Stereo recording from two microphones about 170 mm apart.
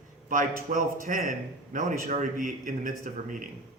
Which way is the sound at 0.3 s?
50° right (ahead or behind).